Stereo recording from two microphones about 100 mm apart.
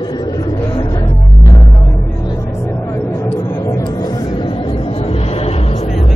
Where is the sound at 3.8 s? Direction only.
40° left (ahead or behind).